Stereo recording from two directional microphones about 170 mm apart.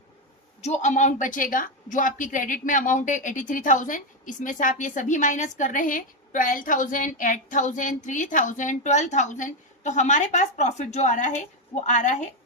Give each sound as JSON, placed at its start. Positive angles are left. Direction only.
{"t": 0.6, "sound": "a woman's voice", "side_deg": 45}